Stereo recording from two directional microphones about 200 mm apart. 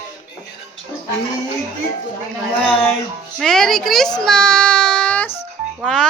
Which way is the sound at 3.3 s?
Centre (ahead or behind).